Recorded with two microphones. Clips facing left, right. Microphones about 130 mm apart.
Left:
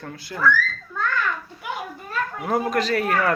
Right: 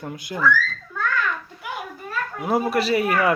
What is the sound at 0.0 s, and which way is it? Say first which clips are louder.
Speech: right 3 dB; 20° right (ahead or behind).